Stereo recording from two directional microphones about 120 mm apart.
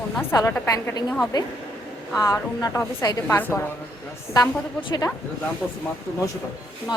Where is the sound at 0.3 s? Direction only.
30° left (ahead or behind).